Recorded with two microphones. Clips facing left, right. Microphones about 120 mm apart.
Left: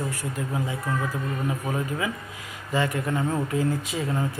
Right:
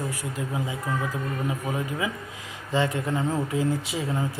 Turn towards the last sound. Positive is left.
turn(degrees=-5)  # may be behind; listen again after turning